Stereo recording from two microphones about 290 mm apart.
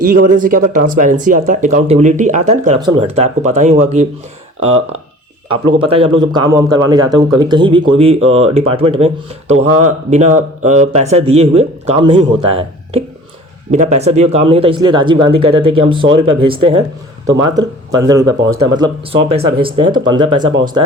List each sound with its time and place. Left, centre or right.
0.0 s speech: right
17.9 s speech: centre